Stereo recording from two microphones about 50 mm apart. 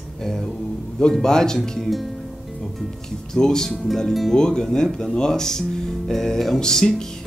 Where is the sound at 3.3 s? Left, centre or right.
Centre.